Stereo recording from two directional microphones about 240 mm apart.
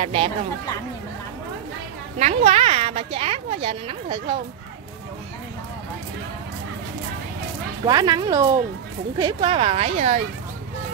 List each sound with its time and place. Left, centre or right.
0.0 s a woman's voice: right
2.1 s a woman's voice: right
7.8 s a woman's voice: centre